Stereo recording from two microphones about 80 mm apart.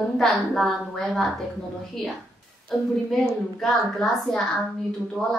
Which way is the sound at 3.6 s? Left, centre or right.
Centre.